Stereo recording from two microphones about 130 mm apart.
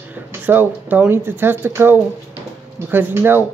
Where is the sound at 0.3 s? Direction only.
15° right (ahead or behind).